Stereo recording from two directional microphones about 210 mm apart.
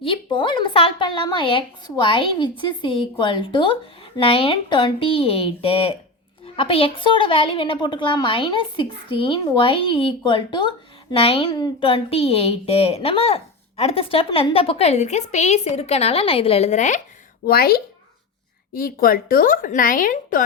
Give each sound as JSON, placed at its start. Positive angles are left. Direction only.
{"t": 0.0, "sound": "a woman's voice", "side_deg": 25}
{"t": 17.4, "sound": "a woman's voice", "side_deg": 45}